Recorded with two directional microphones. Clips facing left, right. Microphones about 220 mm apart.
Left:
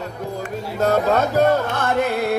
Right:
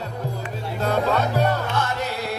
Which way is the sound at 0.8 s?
45° left (ahead or behind).